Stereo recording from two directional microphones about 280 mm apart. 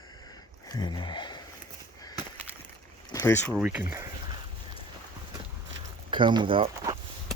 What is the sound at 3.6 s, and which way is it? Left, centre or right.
Speech, centre.